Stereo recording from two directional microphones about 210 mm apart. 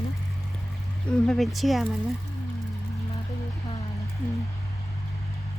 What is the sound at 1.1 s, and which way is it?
Speech, centre (ahead or behind).